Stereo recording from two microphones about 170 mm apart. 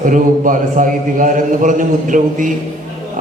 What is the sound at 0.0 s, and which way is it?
A man's voice, 50° right (ahead or behind).